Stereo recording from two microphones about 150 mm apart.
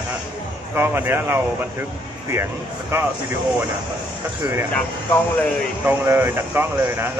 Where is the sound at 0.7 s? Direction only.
15° right (ahead or behind).